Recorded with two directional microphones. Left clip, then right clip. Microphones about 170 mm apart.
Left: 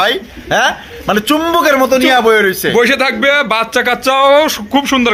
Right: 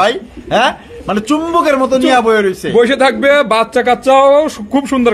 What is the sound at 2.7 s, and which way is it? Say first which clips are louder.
Speech: right 4 dB; 25° right (ahead or behind).